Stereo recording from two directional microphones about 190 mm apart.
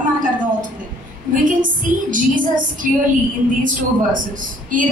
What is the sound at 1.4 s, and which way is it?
A woman's voice, 45° right (ahead or behind).